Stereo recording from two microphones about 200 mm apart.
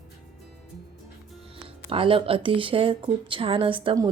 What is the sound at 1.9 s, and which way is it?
Speech, 25° right (ahead or behind).